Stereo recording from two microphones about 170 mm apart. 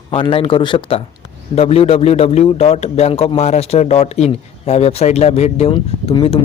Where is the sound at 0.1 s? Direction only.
30° left (ahead or behind).